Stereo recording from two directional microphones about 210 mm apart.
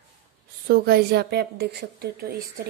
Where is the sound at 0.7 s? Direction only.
45° right (ahead or behind).